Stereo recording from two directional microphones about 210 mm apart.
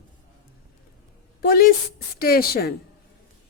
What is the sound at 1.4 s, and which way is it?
A woman's voice, 45° left (ahead or behind).